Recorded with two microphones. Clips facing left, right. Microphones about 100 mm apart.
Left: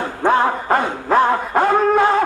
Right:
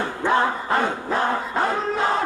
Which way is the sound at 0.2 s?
50° left (ahead or behind).